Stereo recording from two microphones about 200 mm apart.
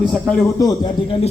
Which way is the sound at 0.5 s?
20° left (ahead or behind).